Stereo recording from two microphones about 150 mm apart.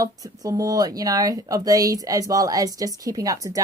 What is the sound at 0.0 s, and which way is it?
A woman's voice, 25° right (ahead or behind).